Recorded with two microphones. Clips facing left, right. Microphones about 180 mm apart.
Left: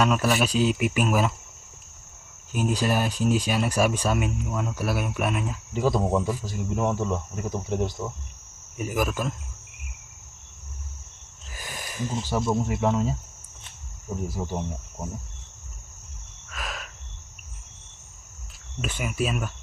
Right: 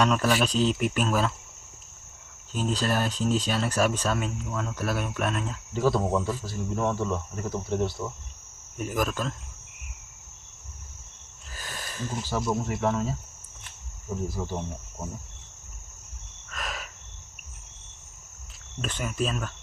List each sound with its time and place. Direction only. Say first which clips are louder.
0.0 s speech: left 1 dB; 5° left (ahead or behind)
2.5 s speech: left 2 dB; 10° left (ahead or behind)
11.5 s a sound: left 3 dB; 15° left (ahead or behind)
12.1 s speech: left 3 dB; 15° left (ahead or behind)
14.3 s speech: left 2 dB; 10° left (ahead or behind)
16.5 s a sound: even; centre (ahead or behind)
18.8 s speech: left 1 dB; 10° left (ahead or behind)